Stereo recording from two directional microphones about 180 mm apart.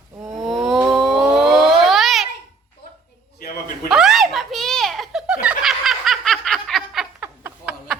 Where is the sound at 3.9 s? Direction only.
Centre (ahead or behind).